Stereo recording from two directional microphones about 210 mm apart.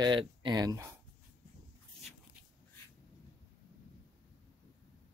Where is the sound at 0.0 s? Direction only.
20° right (ahead or behind).